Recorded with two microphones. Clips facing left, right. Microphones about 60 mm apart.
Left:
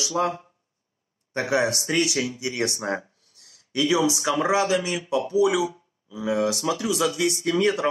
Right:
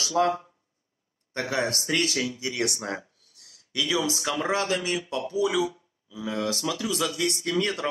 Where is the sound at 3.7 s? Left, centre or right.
Left.